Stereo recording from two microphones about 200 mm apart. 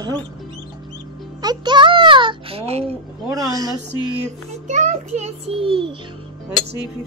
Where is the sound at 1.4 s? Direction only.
20° right (ahead or behind).